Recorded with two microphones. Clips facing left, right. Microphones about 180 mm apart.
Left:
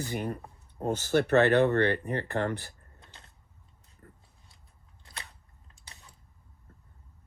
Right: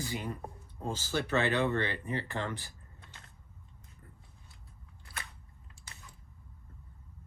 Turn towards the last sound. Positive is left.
turn(degrees=35)  # may be behind; listen again after turning